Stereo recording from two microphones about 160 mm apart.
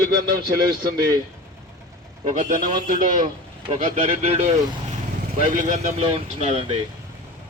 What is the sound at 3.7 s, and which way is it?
Speech, 45° right (ahead or behind).